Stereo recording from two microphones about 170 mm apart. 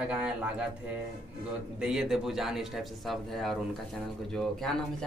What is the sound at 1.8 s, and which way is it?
Speech, 5° right (ahead or behind).